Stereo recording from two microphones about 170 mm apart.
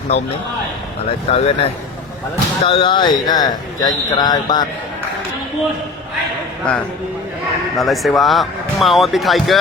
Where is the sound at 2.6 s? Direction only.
30° left (ahead or behind).